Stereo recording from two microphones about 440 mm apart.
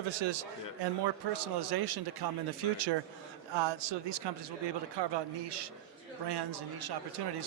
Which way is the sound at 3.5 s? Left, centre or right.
Right.